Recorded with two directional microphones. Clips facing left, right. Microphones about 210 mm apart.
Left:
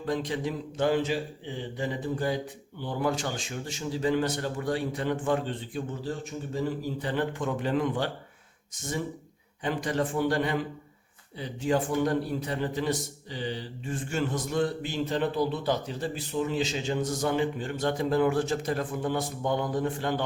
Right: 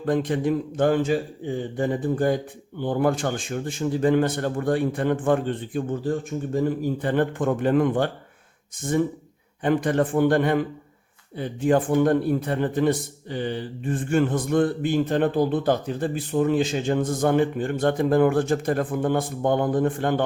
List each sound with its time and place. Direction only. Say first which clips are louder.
0.0 s a man's voice: right 7 dB; 55° right (ahead or behind)